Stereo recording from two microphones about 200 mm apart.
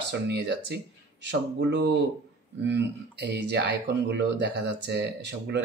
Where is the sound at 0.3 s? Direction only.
60° right (ahead or behind).